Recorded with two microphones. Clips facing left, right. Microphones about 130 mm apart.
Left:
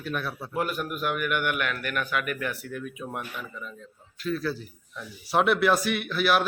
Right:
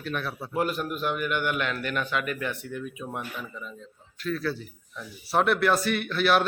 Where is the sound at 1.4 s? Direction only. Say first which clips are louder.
Right 1 dB; 20° right (ahead or behind).